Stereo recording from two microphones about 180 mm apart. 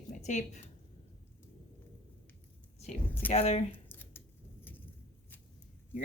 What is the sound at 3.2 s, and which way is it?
Speech, 35° left (ahead or behind).